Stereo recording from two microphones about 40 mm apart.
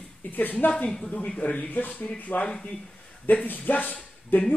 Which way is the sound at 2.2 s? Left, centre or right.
Left.